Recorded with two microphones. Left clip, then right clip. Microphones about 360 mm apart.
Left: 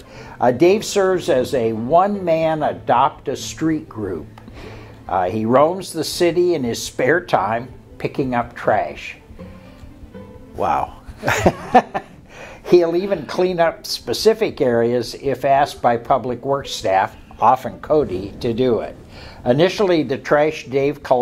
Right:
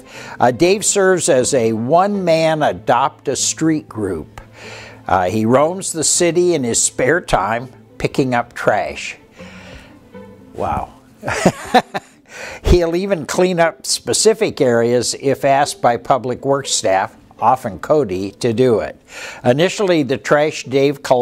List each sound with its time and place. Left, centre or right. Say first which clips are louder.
0.1 s speech: right 2 dB; right
10.6 s speech: left 2 dB; right
11.4 s speech: right 1 dB; right